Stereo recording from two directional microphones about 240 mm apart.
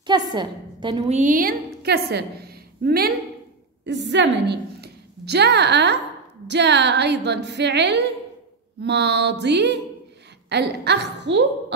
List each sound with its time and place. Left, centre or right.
0.0 s a woman's voice: centre; by 11.4 s right